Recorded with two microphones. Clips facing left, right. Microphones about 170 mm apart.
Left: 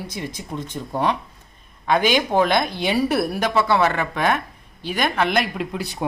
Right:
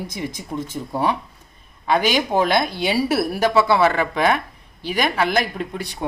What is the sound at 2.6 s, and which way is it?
Speech, 55° left (ahead or behind).